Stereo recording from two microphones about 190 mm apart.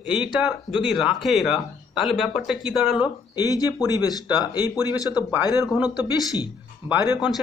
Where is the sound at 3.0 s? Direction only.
20° left (ahead or behind).